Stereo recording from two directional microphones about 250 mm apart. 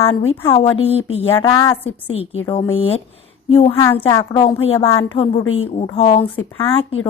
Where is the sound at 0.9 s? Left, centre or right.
Left.